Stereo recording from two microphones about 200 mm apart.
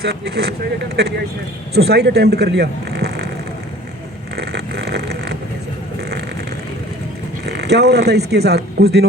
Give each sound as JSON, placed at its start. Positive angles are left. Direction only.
{"t": 0.0, "sound": "speech", "side_deg": -55}
{"t": 4.4, "sound": "vehicle", "side_deg": -55}
{"t": 7.4, "sound": "speech", "side_deg": -55}